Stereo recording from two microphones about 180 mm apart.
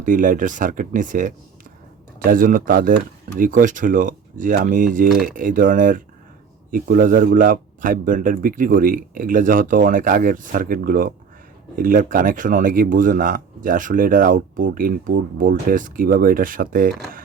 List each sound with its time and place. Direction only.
0.0 s speech: 45° right (ahead or behind)